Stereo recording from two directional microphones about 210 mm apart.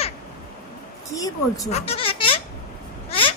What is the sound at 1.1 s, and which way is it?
Speech, 15° left (ahead or behind).